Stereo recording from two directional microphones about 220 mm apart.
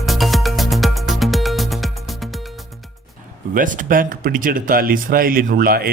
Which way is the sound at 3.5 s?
35° right (ahead or behind).